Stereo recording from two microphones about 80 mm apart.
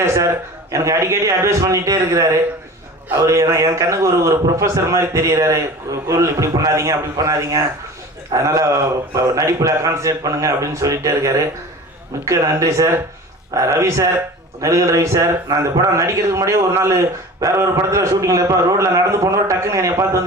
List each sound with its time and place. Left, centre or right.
0.0 s a man's voice: right